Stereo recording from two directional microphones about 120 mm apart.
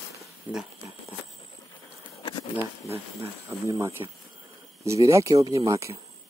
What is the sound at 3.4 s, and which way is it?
Speech, 25° right (ahead or behind).